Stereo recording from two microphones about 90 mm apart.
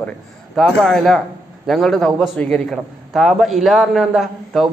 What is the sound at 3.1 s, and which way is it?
A man's voice, 5° right (ahead or behind).